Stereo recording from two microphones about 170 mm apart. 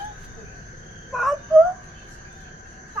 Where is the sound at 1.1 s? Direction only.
Centre (ahead or behind).